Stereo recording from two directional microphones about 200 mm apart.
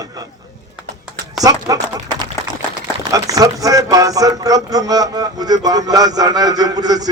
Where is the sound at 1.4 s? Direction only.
15° right (ahead or behind).